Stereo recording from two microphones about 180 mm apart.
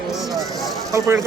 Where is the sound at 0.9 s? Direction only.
15° right (ahead or behind).